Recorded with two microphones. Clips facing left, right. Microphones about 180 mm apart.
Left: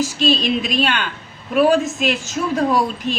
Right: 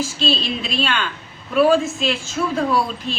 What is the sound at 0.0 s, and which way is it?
A woman's voice, 15° left (ahead or behind).